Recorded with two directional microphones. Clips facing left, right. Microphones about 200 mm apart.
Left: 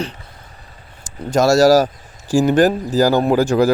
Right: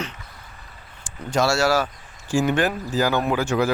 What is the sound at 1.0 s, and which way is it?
Speech, 40° left (ahead or behind).